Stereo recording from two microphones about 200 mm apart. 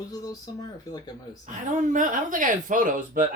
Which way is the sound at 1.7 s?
40° right (ahead or behind).